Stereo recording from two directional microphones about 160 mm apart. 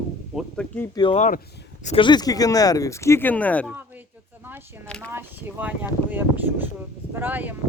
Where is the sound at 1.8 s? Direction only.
35° left (ahead or behind); by 3.7 s 10° left (ahead or behind).